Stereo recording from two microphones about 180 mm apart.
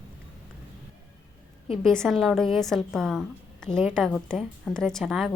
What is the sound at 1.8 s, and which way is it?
A woman's voice, 5° left (ahead or behind).